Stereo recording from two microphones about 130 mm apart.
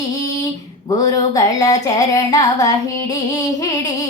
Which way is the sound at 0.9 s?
30° left (ahead or behind).